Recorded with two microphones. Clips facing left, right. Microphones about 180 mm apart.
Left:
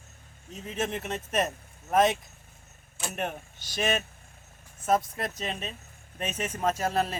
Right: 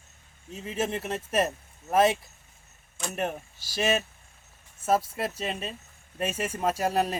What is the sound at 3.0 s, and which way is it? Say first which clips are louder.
Speech: right 2 dB; 5° left (ahead or behind).